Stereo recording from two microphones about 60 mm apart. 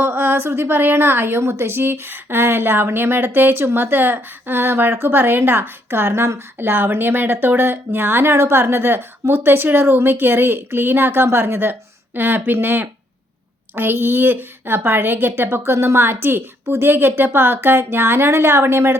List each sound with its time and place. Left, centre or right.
0.0 s a woman's voice: right